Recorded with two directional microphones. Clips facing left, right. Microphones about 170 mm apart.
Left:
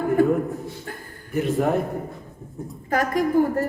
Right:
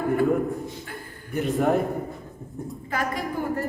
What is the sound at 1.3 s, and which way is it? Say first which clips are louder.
Speech: left 1 dB; centre (ahead or behind).